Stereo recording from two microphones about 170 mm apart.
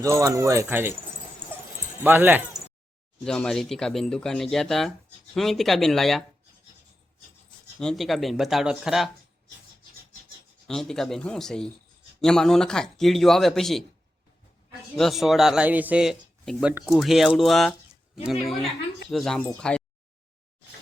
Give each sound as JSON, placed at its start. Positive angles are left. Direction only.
{"t": 0.0, "sound": "speech", "side_deg": -20}
{"t": 2.0, "sound": "speech", "side_deg": -10}
{"t": 3.2, "sound": "speech", "side_deg": 5}
{"t": 7.8, "sound": "speech", "side_deg": 0}
{"t": 10.7, "sound": "speech", "side_deg": 5}
{"t": 14.9, "sound": "speech", "side_deg": 0}